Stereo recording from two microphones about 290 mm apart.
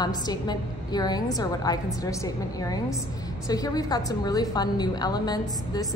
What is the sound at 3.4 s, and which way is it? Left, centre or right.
A woman's voice, centre.